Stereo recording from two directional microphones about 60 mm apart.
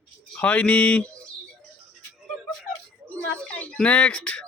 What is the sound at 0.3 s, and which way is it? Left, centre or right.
Speech, left.